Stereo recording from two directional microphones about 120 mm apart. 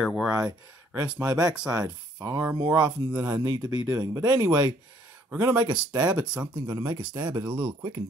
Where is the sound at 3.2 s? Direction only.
35° right (ahead or behind).